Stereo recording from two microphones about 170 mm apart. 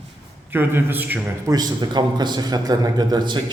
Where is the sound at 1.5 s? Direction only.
25° right (ahead or behind).